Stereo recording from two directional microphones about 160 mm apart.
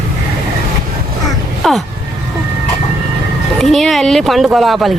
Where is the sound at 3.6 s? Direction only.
Centre (ahead or behind).